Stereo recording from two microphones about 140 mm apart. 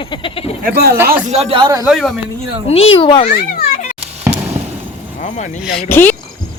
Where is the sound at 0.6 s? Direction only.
90° right.